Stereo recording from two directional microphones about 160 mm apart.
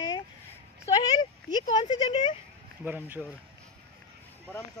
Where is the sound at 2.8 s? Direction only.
10° right (ahead or behind).